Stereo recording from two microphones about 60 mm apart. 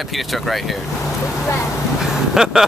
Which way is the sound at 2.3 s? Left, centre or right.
Centre.